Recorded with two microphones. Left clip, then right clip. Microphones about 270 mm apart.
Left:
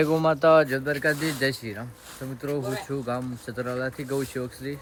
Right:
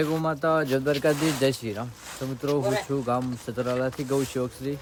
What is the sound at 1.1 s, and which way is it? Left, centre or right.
Speech, right.